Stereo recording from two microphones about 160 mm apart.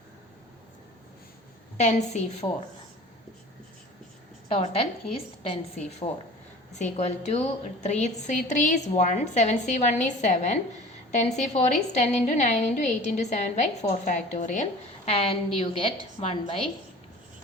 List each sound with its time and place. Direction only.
1.8 s a woman's voice: 45° left (ahead or behind)
4.4 s a woman's voice: 35° left (ahead or behind)